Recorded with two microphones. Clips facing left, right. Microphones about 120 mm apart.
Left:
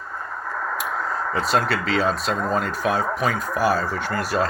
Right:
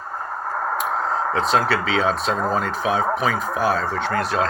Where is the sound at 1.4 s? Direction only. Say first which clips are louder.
Right 1 dB; centre (ahead or behind).